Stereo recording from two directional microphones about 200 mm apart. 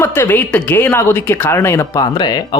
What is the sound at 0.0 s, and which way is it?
Speech, 10° left (ahead or behind).